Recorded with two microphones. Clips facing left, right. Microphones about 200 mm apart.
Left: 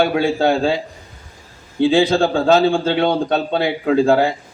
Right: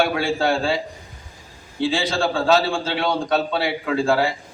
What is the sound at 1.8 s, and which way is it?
A man's voice, 60° left (ahead or behind).